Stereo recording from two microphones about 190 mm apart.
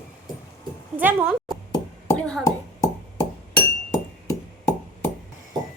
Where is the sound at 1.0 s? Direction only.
10° right (ahead or behind).